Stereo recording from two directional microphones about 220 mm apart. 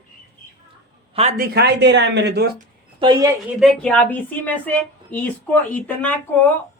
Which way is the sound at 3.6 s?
5° left (ahead or behind).